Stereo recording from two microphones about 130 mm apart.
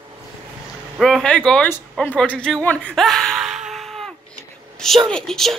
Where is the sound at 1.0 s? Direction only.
5° left (ahead or behind).